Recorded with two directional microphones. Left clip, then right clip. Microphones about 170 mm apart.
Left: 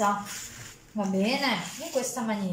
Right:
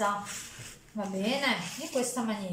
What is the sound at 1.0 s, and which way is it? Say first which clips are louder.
Speech: left 4 dB; 5° left (ahead or behind).